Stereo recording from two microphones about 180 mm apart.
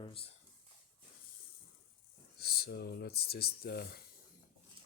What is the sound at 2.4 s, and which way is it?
Speech, 60° left (ahead or behind).